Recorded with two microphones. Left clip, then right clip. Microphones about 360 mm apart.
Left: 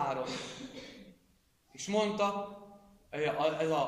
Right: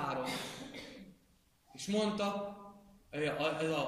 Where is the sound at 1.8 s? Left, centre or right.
Centre.